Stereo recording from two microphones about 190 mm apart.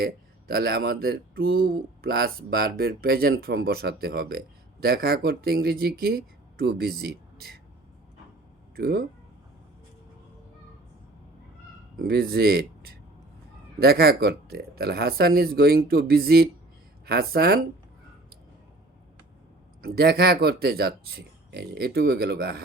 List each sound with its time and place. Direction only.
0.0 s speech: 55° right (ahead or behind)
8.7 s speech: 55° right (ahead or behind)
11.9 s speech: 55° right (ahead or behind)
19.8 s speech: 55° right (ahead or behind)